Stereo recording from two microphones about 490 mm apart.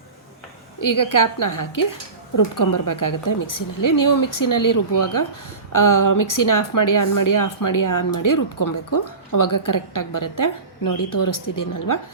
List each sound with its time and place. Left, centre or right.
0.8 s speech: left